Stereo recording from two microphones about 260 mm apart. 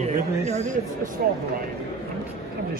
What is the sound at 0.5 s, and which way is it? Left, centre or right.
Speech, right.